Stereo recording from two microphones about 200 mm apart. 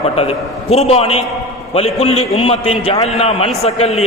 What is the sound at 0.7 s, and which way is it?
A man's voice, 30° left (ahead or behind).